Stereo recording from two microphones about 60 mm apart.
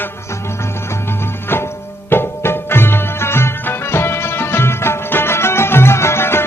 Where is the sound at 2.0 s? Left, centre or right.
Left.